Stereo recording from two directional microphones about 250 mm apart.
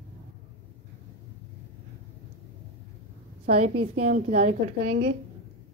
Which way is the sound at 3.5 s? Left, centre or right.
Right.